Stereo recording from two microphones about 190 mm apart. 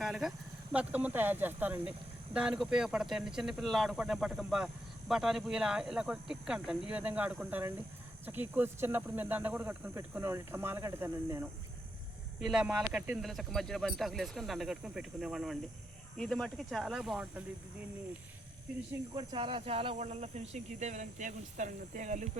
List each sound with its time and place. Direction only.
0.0 s speech: centre (ahead or behind)
12.4 s speech: 5° right (ahead or behind)
19.1 s speech: 25° right (ahead or behind)